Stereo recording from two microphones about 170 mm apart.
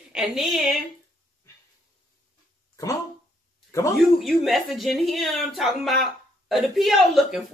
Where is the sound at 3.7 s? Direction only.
20° left (ahead or behind).